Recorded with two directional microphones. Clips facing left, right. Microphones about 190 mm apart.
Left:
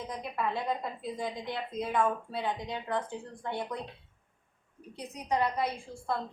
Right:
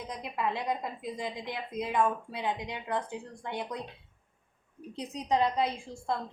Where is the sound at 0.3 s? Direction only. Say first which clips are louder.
Right 1 dB; 15° right (ahead or behind).